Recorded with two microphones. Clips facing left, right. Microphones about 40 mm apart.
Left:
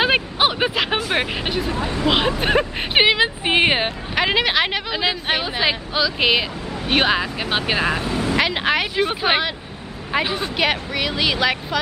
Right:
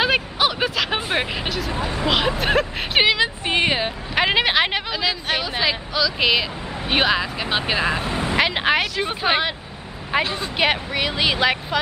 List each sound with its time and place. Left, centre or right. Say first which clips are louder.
0.0 s a sound: left 2 dB; left
1.1 s vehicle: left 2 dB; centre
2.0 s speech: left 1 dB; centre
2.9 s a sound: left 2 dB; left
4.1 s speech: right 1 dB; centre
4.9 s speech: left 2 dB; left; by 7.9 s centre
8.0 s speech: left 2 dB; right
8.4 s speech: right 2 dB; centre
9.0 s speech: left 1 dB; centre
10.6 s speech: right 1 dB; centre